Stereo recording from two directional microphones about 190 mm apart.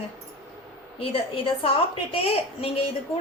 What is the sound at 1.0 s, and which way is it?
A woman's voice, 30° left (ahead or behind).